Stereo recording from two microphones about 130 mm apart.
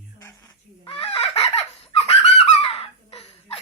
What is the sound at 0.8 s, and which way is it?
Fowl, 45° left (ahead or behind).